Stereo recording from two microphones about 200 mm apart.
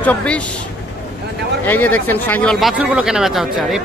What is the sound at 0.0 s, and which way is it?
Speech, 5° left (ahead or behind).